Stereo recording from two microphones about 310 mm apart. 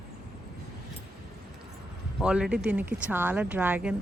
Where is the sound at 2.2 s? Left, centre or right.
Centre.